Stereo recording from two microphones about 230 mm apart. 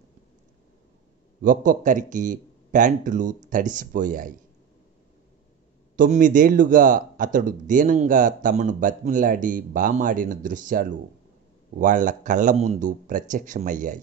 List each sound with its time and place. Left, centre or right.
1.4 s a man's voice: right
5.9 s a man's voice: right